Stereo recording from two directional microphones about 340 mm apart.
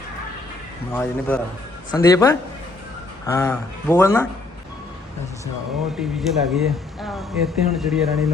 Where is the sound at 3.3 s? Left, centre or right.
Centre.